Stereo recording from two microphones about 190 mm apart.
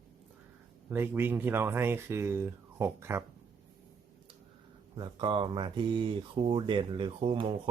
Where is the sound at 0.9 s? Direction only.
10° right (ahead or behind).